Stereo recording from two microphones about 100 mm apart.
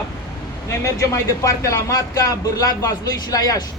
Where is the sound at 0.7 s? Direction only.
30° left (ahead or behind).